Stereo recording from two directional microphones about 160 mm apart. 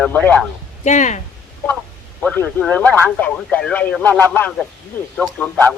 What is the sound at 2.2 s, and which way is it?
A man's voice, 10° left (ahead or behind).